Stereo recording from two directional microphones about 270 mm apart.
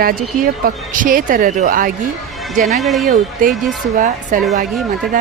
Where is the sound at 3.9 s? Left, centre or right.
Right.